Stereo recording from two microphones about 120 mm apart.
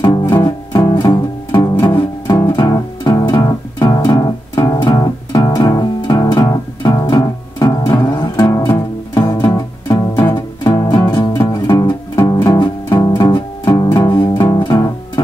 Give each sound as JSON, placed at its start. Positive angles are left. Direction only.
{"t": 0.0, "sound": "music", "side_deg": 30}
{"t": 10.2, "sound": "music", "side_deg": 40}
{"t": 11.8, "sound": "music", "side_deg": 20}
{"t": 12.5, "sound": "music", "side_deg": 35}
{"t": 13.7, "sound": "music", "side_deg": 30}